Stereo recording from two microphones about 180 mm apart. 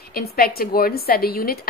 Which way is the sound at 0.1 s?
55° left (ahead or behind).